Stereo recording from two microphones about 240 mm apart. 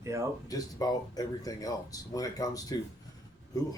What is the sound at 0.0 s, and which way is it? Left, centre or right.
Music, centre.